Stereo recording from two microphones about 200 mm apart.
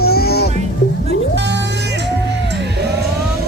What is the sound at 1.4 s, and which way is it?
Music, 60° right (ahead or behind).